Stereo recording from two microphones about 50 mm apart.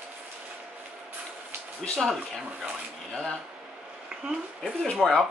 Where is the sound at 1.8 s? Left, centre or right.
Centre.